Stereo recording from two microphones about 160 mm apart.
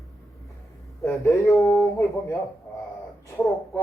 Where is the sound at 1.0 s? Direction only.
15° left (ahead or behind).